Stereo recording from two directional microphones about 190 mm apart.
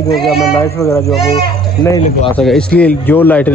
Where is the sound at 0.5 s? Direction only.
15° left (ahead or behind).